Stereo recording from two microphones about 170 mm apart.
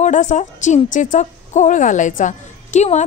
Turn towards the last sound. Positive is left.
turn(degrees=45)  # may be behind; listen again after turning